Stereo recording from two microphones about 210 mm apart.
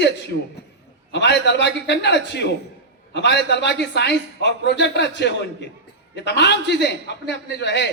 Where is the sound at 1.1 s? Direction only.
55° left (ahead or behind).